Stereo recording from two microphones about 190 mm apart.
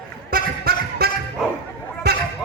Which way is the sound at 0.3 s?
50° right (ahead or behind).